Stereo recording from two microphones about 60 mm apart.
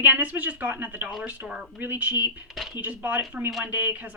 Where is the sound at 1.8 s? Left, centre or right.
Right.